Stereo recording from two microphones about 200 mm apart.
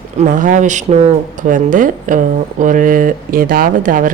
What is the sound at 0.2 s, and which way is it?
Speech, 40° right (ahead or behind).